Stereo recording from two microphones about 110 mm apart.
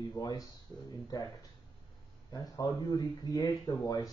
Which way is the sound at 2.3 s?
35° left (ahead or behind).